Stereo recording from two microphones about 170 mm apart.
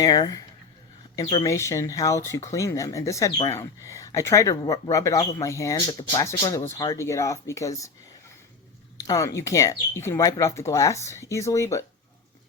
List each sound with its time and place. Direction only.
0.0 s speech: 25° left (ahead or behind)
9.0 s speech: 20° left (ahead or behind)